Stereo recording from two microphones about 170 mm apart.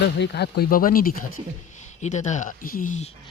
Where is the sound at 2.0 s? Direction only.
45° left (ahead or behind).